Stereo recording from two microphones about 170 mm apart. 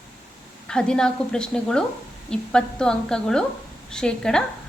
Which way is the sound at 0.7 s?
5° left (ahead or behind).